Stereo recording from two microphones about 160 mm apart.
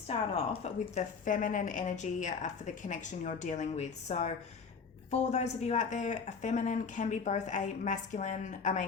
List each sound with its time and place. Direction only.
0.1 s a woman's voice: 40° left (ahead or behind)